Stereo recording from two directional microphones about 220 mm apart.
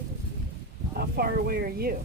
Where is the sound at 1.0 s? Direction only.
45° right (ahead or behind).